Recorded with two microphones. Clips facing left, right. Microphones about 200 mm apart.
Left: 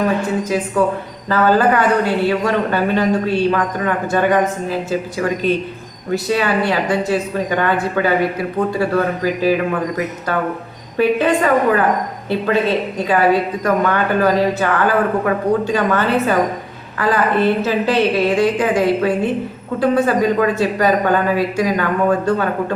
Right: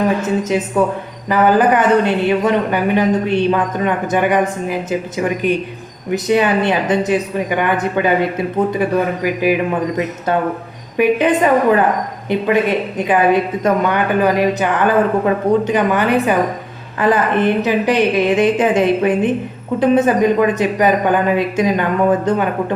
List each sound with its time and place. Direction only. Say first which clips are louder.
0.2 s speech: right 2 dB; 20° right (ahead or behind)
10.9 s a woman's voice: right 1 dB; 15° right (ahead or behind)